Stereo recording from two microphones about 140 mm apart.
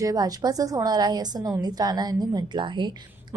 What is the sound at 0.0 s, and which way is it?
A woman's voice, 25° right (ahead or behind).